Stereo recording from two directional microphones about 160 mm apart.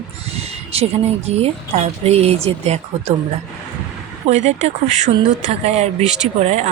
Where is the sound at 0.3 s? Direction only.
40° right (ahead or behind).